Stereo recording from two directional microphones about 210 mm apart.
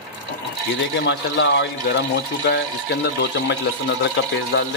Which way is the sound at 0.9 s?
60° left (ahead or behind).